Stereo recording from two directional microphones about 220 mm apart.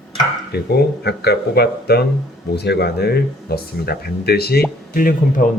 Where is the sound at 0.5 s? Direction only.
45° left (ahead or behind).